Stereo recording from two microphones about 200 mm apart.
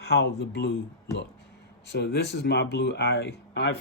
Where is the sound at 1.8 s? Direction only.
55° left (ahead or behind).